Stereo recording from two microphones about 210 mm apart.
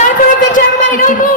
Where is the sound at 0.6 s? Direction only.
40° left (ahead or behind).